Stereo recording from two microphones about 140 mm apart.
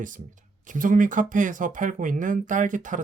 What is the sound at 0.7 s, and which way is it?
Speech, 75° right (ahead or behind).